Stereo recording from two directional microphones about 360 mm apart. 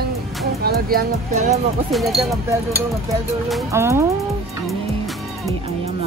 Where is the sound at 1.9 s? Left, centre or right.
Centre.